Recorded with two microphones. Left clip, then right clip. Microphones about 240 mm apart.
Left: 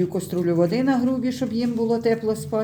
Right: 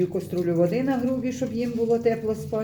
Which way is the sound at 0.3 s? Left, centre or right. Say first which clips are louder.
Left 3 dB; left.